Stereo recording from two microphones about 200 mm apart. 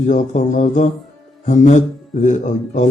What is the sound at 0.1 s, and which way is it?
A man's voice, 35° left (ahead or behind).